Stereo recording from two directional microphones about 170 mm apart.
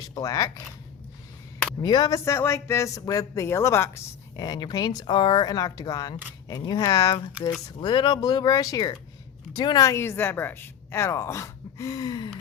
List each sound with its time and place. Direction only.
0.1 s a man's voice: 20° left (ahead or behind)
1.8 s a man's voice: 25° left (ahead or behind)